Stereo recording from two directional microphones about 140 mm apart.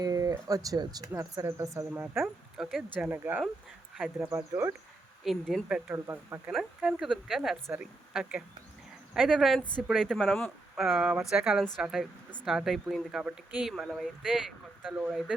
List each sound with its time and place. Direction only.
0.0 s speech: 25° right (ahead or behind)
2.6 s speech: centre (ahead or behind)
3.1 s speech: 15° right (ahead or behind)
3.9 s speech: 5° right (ahead or behind)
6.5 s speech: centre (ahead or behind)